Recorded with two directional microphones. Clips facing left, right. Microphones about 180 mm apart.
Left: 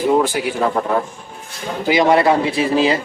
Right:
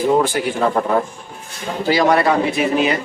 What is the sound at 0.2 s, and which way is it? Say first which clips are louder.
Speech: even; 10° left (ahead or behind).